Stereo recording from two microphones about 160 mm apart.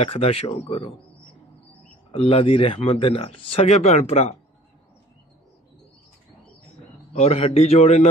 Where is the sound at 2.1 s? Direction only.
35° left (ahead or behind).